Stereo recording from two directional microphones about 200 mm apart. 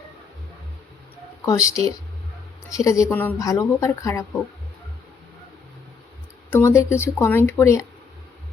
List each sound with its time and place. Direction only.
1.5 s speech: 15° left (ahead or behind)
6.5 s speech: 10° left (ahead or behind)